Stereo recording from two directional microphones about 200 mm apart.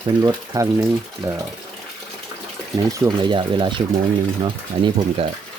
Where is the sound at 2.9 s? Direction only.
20° right (ahead or behind).